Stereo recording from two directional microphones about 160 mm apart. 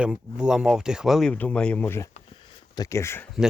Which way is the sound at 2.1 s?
35° left (ahead or behind).